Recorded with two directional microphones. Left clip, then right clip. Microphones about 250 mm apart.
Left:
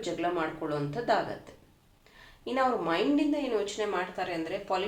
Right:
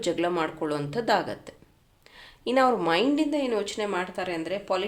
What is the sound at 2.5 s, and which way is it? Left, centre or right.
A woman's voice, right.